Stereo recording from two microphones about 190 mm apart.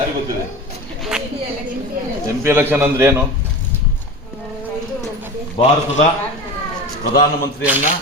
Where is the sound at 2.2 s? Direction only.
10° right (ahead or behind).